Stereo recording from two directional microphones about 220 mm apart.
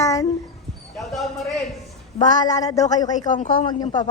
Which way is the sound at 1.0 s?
Centre (ahead or behind).